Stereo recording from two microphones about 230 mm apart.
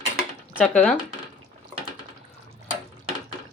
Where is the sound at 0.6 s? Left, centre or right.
Centre.